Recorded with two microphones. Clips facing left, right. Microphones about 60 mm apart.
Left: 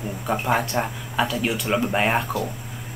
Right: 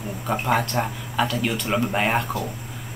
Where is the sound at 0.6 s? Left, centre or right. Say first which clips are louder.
Even; centre.